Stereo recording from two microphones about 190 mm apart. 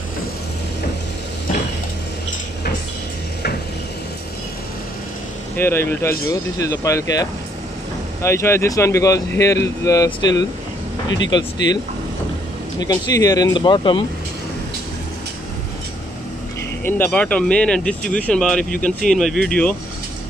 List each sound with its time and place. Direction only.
5.6 s speech: 10° left (ahead or behind)
11.1 s speech: 75° left (ahead or behind)
12.7 s speech: 20° left (ahead or behind)
16.8 s speech: 10° left (ahead or behind)